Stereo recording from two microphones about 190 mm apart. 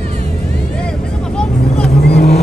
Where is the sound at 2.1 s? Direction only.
60° left (ahead or behind).